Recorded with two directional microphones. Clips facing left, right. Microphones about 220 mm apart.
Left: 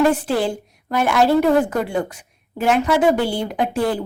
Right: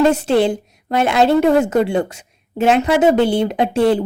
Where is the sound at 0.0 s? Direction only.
20° right (ahead or behind).